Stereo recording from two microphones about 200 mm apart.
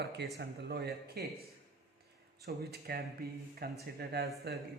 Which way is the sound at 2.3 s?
55° right (ahead or behind).